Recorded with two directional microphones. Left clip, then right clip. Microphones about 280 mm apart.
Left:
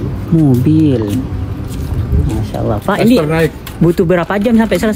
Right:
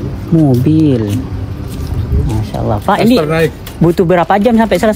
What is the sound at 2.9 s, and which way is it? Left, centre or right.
Speech, centre.